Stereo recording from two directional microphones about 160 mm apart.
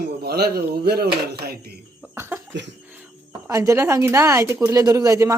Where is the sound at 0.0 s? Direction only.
85° right.